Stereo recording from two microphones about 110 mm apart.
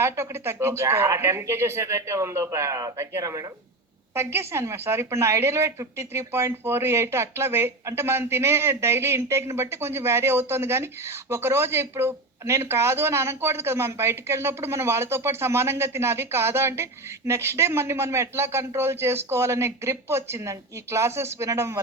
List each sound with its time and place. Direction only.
0.0 s a woman's voice: 25° right (ahead or behind)